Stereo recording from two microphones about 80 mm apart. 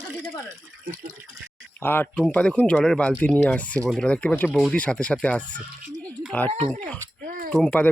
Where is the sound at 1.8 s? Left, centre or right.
Left.